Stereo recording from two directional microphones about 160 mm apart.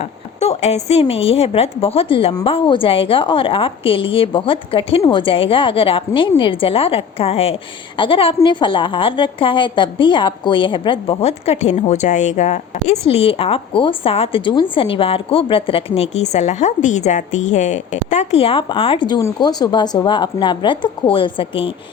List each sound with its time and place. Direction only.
0.0 s a woman's voice: 40° left (ahead or behind)